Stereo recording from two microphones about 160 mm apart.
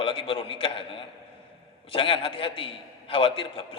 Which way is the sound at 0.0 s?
35° left (ahead or behind).